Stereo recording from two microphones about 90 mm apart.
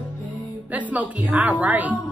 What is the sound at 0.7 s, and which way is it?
A woman's voice, 15° right (ahead or behind).